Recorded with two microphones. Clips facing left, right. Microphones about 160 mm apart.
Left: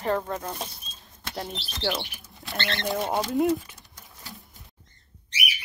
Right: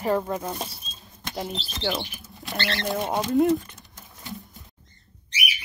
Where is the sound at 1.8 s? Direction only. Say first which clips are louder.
Even; centre (ahead or behind).